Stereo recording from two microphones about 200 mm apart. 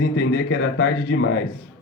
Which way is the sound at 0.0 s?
55° left (ahead or behind).